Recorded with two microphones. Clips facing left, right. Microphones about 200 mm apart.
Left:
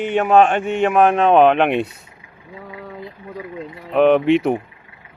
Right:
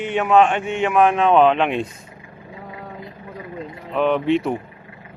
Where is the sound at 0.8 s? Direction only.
40° left (ahead or behind); by 1.9 s 65° left (ahead or behind).